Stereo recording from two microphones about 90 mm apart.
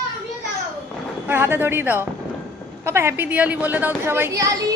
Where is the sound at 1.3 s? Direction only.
25° right (ahead or behind).